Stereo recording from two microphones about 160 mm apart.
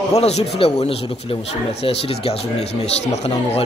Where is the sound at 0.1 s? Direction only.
40° left (ahead or behind).